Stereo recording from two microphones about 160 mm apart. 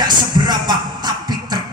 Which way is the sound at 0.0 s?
25° right (ahead or behind).